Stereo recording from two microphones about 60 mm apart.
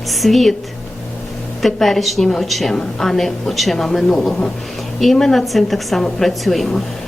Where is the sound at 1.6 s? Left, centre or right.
Centre.